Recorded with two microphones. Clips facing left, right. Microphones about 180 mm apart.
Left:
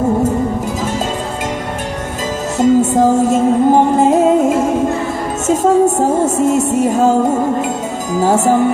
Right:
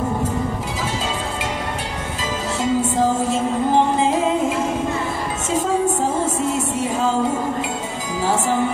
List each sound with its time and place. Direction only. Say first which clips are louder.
2.6 s music: left 9 dB; 45° left (ahead or behind)
6.2 s music: left 8 dB; 45° left (ahead or behind)
8.2 s music: left 8 dB; 45° left (ahead or behind)